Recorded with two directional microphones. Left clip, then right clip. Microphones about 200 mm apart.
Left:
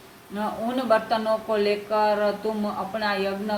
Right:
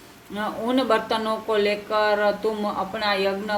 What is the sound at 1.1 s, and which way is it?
Speech, 50° right (ahead or behind).